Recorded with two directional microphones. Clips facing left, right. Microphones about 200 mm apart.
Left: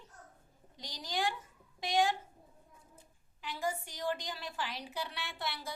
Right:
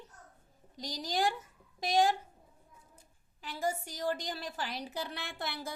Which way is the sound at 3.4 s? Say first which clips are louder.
Right 2 dB; 40° right (ahead or behind).